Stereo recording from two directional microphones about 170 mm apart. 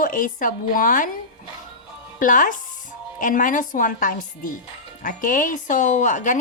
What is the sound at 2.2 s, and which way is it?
Speech, 50° left (ahead or behind).